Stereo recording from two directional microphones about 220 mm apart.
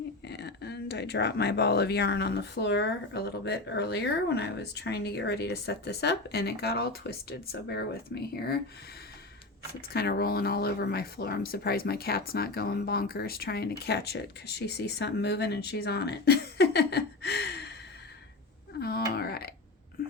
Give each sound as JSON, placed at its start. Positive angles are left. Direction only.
{"t": 0.3, "sound": "speech", "side_deg": 50}
{"t": 9.9, "sound": "speech", "side_deg": 45}
{"t": 18.8, "sound": "wail", "side_deg": 45}